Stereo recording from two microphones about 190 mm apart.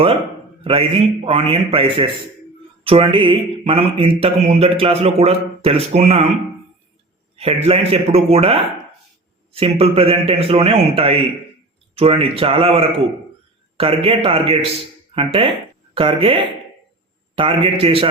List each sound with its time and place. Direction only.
0.6 s a man's voice: 30° right (ahead or behind)
7.3 s a man's voice: 30° right (ahead or behind)